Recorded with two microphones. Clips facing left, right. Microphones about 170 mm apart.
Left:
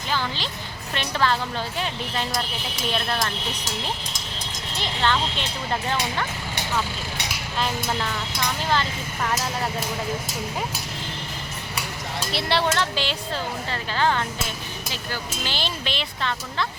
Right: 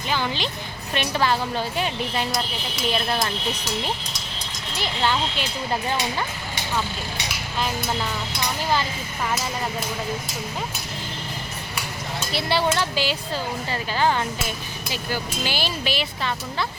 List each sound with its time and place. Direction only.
0.1 s music: 15° right (ahead or behind)
0.9 s speech: 15° right (ahead or behind)
4.8 s speech: 10° right (ahead or behind)
8.7 s speech: 10° right (ahead or behind)
12.3 s speech: centre (ahead or behind)